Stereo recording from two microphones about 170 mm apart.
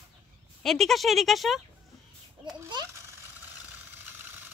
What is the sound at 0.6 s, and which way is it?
Speech, centre (ahead or behind).